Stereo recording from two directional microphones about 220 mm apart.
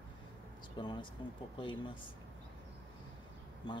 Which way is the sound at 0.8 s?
20° left (ahead or behind).